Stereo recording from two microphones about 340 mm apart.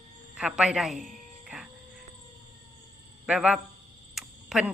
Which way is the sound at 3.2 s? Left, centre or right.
Centre.